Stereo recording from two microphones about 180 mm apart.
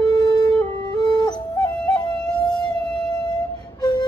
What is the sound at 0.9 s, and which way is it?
Music, 20° left (ahead or behind).